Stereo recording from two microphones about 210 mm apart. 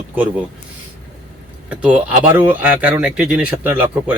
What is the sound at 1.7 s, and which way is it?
Speech, 5° right (ahead or behind).